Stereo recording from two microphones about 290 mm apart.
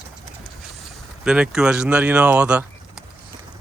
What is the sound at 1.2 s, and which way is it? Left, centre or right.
Speech, centre.